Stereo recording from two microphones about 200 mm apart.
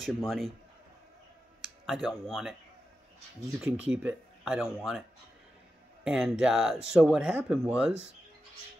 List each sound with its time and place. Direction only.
0.0 s speech: centre (ahead or behind)
1.6 s speech: centre (ahead or behind)
3.6 s speech: 5° right (ahead or behind)
6.0 s speech: 5° right (ahead or behind)